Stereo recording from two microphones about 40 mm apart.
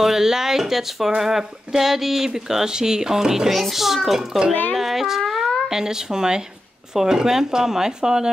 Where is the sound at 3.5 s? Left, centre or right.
Centre.